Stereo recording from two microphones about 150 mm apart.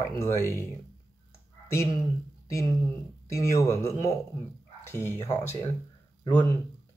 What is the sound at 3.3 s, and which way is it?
Speech, 20° left (ahead or behind).